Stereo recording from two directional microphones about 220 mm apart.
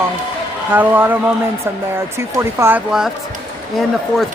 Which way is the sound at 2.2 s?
10° right (ahead or behind).